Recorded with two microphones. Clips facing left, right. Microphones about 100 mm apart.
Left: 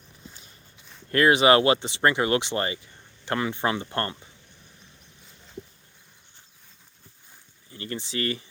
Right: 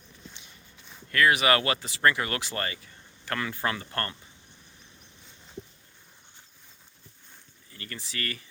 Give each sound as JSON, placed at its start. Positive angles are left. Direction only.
{"t": 1.1, "sound": "speech", "side_deg": 30}
{"t": 7.7, "sound": "speech", "side_deg": 25}